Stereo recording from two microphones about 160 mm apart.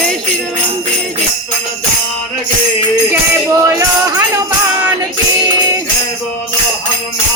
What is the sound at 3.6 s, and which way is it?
Music, 15° right (ahead or behind).